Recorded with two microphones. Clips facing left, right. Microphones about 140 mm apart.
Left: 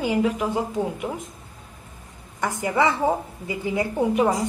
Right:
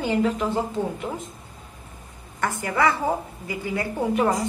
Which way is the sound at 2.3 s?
15° left (ahead or behind).